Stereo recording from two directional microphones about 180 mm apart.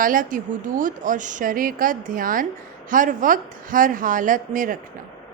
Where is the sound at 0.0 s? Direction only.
50° right (ahead or behind).